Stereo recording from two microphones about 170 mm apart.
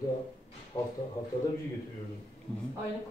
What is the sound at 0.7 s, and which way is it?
Speech, 25° left (ahead or behind).